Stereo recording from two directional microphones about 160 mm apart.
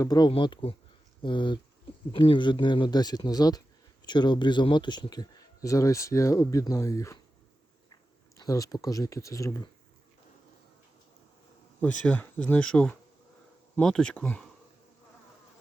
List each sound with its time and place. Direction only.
0.0 s speech: 25° left (ahead or behind)
8.4 s speech: 20° left (ahead or behind)
11.8 s speech: 10° left (ahead or behind)